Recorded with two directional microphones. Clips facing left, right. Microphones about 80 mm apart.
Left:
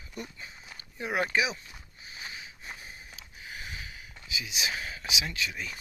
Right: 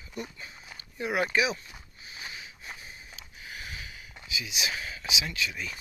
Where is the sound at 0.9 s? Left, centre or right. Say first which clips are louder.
Right 2 dB; left.